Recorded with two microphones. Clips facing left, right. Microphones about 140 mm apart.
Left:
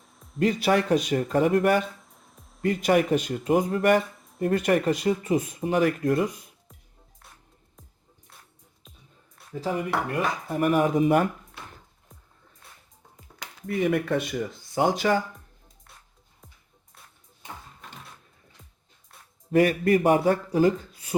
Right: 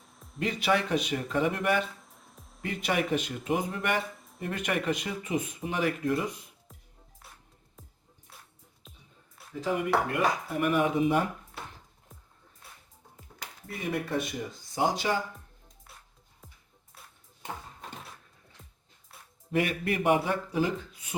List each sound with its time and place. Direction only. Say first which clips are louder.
0.0 s music: even; centre (ahead or behind)
0.3 s speech: left 5 dB; 45° left (ahead or behind)
2.0 s music: even; centre (ahead or behind)
2.6 s speech: left 8 dB; 40° left (ahead or behind)
4.1 s a sound: left 10 dB; centre (ahead or behind)
4.4 s speech: left 8 dB; 40° left (ahead or behind)
9.6 s speech: even; 35° left (ahead or behind)
12.6 s music: even; 5° right (ahead or behind)
13.7 s speech: left 8 dB; 90° left
14.9 s speech: left 6 dB; 50° left (ahead or behind)
19.5 s speech: left 8 dB; 40° left (ahead or behind)